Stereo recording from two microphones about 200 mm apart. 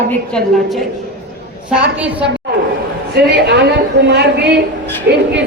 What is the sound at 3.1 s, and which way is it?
A man's voice, 55° right (ahead or behind).